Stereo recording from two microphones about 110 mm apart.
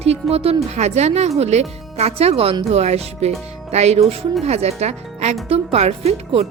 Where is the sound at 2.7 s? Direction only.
75° right (ahead or behind).